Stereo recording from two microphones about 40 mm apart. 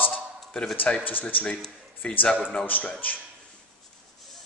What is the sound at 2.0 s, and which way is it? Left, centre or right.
Speech, left.